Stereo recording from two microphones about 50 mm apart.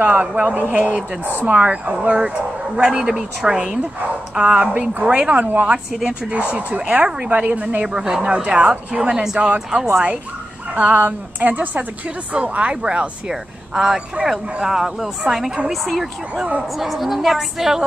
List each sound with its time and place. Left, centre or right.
0.0 s speech: right
5.9 s speech: centre
7.2 s speech: right
7.8 s a woman's voice: centre; by 11.8 s right
12.3 s a woman's voice: right; by 17.8 s centre